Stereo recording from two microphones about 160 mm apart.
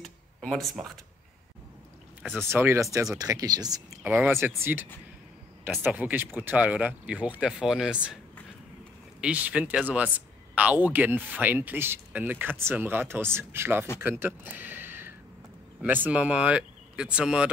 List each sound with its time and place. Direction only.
0.0 s a sound: 5° left (ahead or behind)
2.5 s speech: 15° right (ahead or behind)
4.0 s speech: 10° right (ahead or behind)
9.2 s speech: 10° right (ahead or behind)
14.2 s a sound: 10° right (ahead or behind)
15.8 s speech: 10° right (ahead or behind)